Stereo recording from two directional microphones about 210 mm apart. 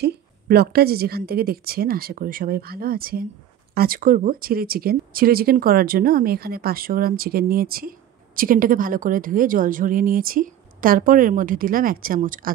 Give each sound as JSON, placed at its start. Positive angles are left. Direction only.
{"t": 0.0, "sound": "speech", "side_deg": -50}